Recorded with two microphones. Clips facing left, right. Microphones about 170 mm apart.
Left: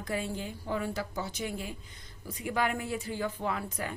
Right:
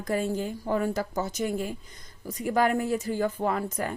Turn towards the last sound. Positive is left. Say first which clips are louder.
# right 6 dB
turn(degrees=-45)  # may be behind; listen again after turning